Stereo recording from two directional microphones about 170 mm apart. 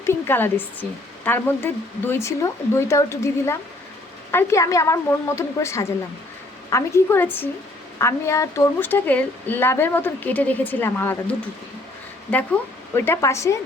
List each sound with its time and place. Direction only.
0.0 s speech: 15° left (ahead or behind)